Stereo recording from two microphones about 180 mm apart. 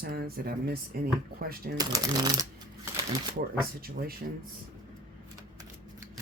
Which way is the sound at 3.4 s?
55° right (ahead or behind).